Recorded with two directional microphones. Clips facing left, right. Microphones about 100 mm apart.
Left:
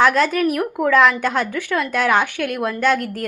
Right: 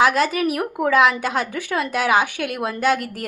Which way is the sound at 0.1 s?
15° right (ahead or behind).